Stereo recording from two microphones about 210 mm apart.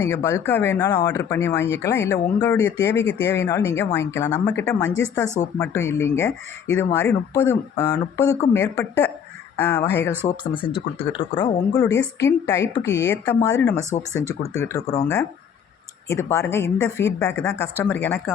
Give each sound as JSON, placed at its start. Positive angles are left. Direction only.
{"t": 0.0, "sound": "speech", "side_deg": 10}
{"t": 10.2, "sound": "speech", "side_deg": 25}
{"t": 16.0, "sound": "speech", "side_deg": 15}